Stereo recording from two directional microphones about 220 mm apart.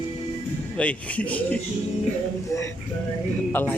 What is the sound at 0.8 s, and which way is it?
A man's voice, 5° left (ahead or behind).